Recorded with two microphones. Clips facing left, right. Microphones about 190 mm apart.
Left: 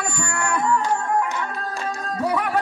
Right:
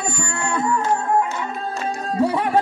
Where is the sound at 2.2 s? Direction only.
30° right (ahead or behind).